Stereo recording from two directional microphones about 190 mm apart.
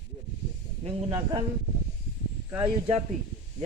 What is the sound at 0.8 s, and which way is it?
Speech, 30° right (ahead or behind).